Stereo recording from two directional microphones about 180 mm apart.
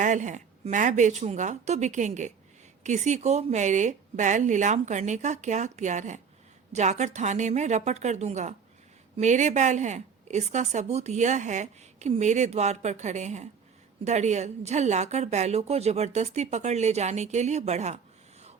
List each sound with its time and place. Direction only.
0.0 s a woman's voice: 45° right (ahead or behind)